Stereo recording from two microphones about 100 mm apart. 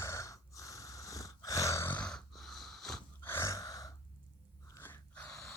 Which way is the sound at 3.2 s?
25° left (ahead or behind).